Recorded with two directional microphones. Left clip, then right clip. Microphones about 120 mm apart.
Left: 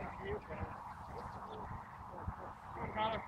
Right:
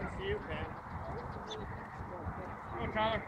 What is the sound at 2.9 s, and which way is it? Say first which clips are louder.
Speech: right 4 dB; 25° right (ahead or behind).